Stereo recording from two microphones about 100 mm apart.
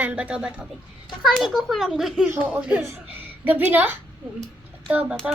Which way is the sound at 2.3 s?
15° right (ahead or behind).